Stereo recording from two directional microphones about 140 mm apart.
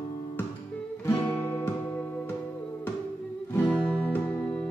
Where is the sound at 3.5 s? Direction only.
10° left (ahead or behind).